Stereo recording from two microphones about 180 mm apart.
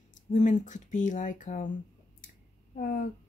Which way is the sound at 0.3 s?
45° left (ahead or behind).